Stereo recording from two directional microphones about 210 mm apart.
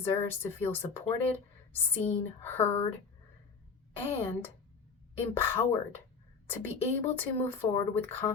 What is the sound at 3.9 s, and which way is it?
Speech, 10° left (ahead or behind).